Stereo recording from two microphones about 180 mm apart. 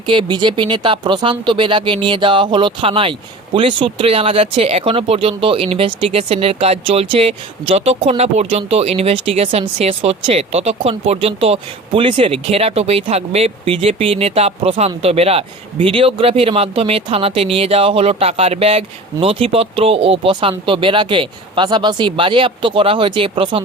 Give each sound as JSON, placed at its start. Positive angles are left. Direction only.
{"t": 0.0, "sound": "speech", "side_deg": -25}